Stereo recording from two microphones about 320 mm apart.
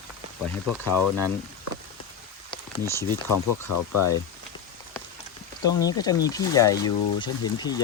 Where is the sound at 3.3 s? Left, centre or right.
Left.